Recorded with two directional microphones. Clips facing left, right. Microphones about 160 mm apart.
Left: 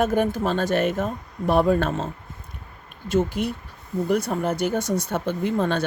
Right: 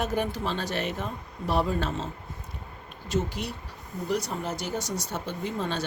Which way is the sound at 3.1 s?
55° left (ahead or behind).